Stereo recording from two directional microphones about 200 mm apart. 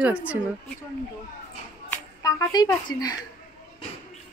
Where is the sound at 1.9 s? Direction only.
15° left (ahead or behind).